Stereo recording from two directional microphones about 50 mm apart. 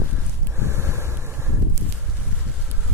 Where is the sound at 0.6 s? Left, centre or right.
Right.